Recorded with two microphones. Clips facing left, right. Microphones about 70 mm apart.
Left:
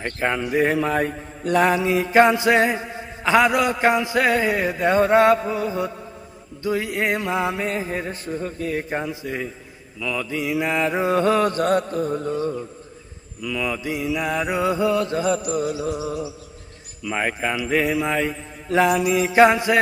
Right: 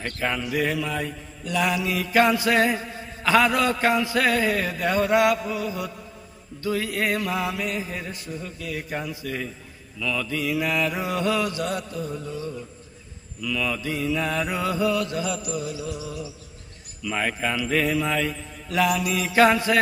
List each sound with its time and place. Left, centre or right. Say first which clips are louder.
0.0 s mantra: left 4 dB; left
13.4 s mantra: left 1 dB; centre; by 16.2 s left
17.0 s mantra: left 2 dB; centre